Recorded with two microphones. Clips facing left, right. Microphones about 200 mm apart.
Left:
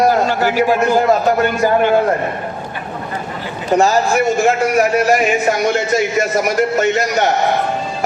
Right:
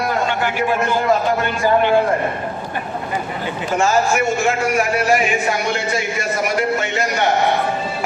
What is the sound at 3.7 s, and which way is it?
A man's voice, 40° left (ahead or behind).